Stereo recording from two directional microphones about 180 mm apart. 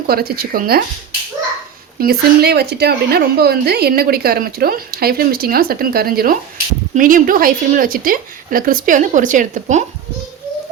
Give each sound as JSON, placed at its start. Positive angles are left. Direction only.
{"t": 0.1, "sound": "a woman's voice", "side_deg": -55}
{"t": 2.0, "sound": "a woman's voice", "side_deg": -60}